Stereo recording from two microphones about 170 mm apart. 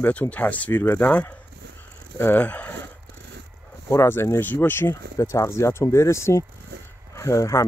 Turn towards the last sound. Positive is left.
turn(degrees=20)  # may be behind; listen again after turning